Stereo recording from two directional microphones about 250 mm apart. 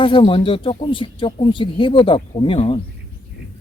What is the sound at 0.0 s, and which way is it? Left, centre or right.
Speech, left.